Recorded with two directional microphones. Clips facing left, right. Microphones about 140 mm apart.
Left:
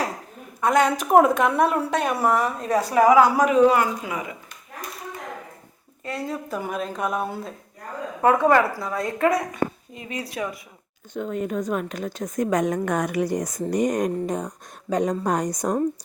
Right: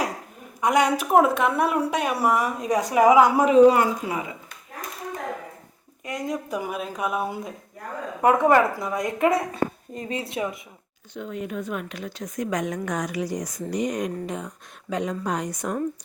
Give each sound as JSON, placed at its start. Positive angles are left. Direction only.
{"t": 0.6, "sound": "a woman's voice", "side_deg": -10}
{"t": 1.1, "sound": "a woman's voice", "side_deg": 0}
{"t": 6.1, "sound": "a woman's voice", "side_deg": -15}
{"t": 9.9, "sound": "a woman's voice", "side_deg": -40}
{"t": 10.2, "sound": "a woman's voice", "side_deg": -25}
{"t": 11.1, "sound": "a woman's voice", "side_deg": 45}